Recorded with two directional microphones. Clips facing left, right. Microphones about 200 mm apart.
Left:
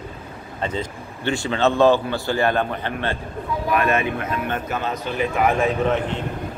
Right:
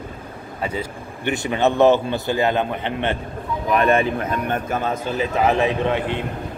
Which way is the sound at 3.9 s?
35° right (ahead or behind).